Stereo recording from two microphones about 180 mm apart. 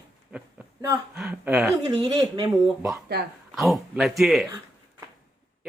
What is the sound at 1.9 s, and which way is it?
Speech, 20° right (ahead or behind).